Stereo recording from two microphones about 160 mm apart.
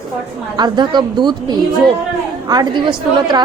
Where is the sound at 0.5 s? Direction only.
25° right (ahead or behind).